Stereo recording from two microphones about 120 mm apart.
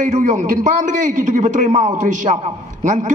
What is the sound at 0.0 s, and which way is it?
A man's voice, 90° right.